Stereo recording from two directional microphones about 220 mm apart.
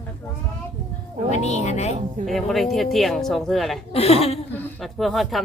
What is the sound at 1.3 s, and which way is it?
Speech, 30° left (ahead or behind).